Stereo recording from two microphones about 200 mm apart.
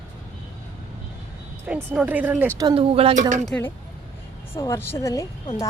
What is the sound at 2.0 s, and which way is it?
Speech, 10° right (ahead or behind).